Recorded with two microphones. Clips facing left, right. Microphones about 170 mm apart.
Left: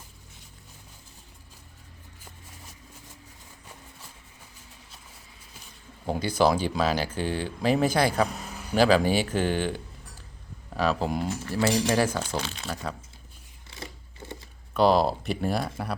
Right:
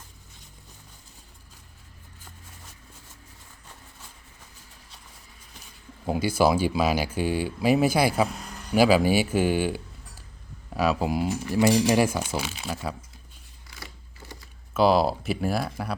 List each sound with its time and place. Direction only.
6.1 s speech: 10° right (ahead or behind)
8.7 s speech: 10° right (ahead or behind)
13.7 s a sound: 25° left (ahead or behind)
14.7 s speech: centre (ahead or behind)